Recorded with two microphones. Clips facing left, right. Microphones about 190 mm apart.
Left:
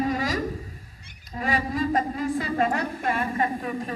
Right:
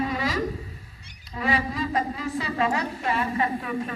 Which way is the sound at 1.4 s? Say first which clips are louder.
Left 1 dB; 45° left (ahead or behind).